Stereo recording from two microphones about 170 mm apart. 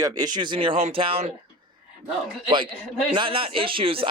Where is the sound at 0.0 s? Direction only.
20° right (ahead or behind).